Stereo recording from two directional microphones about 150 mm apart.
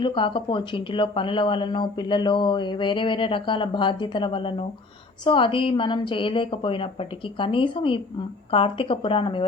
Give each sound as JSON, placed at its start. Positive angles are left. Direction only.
{"t": 0.0, "sound": "speech", "side_deg": 35}